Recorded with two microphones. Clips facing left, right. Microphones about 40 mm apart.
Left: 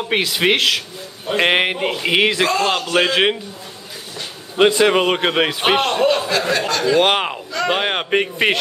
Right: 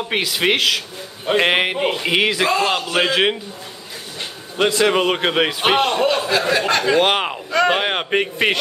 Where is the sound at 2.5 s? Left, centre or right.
Centre.